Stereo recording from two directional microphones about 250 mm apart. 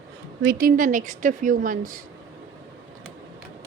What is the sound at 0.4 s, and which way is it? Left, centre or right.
Speech, right.